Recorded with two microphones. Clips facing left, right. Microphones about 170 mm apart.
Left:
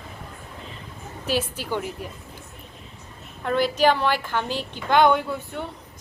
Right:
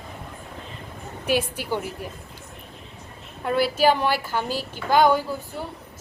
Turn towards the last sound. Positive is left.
turn(degrees=-5)  # may be behind; listen again after turning